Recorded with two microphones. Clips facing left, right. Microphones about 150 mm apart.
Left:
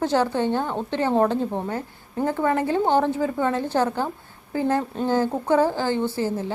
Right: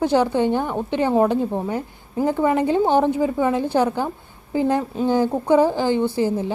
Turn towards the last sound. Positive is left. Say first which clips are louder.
# right 4 dB
turn(degrees=-15)  # may be behind; listen again after turning